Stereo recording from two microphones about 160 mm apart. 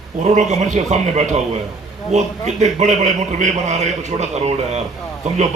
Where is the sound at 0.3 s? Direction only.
50° right (ahead or behind).